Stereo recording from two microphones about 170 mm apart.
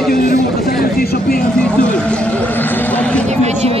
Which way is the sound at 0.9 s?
65° left (ahead or behind).